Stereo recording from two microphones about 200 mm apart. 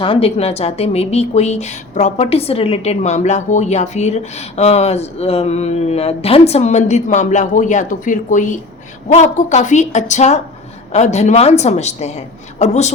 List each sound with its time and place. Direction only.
0.0 s a woman's voice: 25° left (ahead or behind)